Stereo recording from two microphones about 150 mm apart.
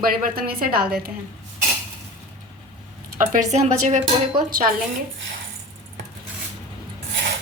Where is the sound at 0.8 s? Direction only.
90° right.